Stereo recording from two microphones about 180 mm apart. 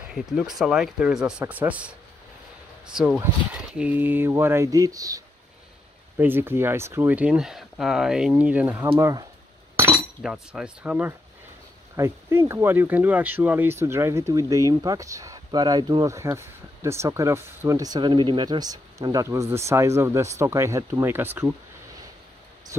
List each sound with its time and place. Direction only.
0.1 s speech: centre (ahead or behind)
10.2 s speech: 5° right (ahead or behind)
22.7 s speech: 15° right (ahead or behind)